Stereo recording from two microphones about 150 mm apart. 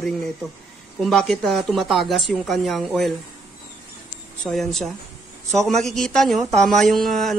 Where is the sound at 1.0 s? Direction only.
5° left (ahead or behind).